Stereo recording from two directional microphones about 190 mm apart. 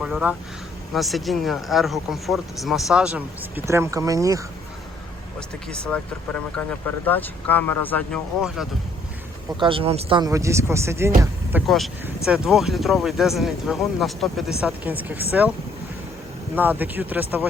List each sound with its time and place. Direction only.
0.0 s speech: 5° right (ahead or behind)
5.7 s speech: 5° left (ahead or behind)
8.4 s speech: 5° right (ahead or behind)
9.6 s speech: 30° right (ahead or behind); by 15.5 s 10° right (ahead or behind)
16.6 s speech: 10° right (ahead or behind)